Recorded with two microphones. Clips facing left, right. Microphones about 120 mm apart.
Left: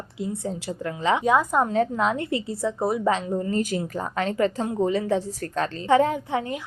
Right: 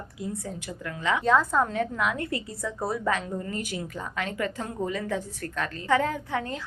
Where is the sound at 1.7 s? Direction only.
30° left (ahead or behind).